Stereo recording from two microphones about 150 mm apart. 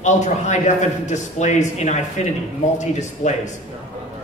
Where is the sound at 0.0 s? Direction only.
50° left (ahead or behind).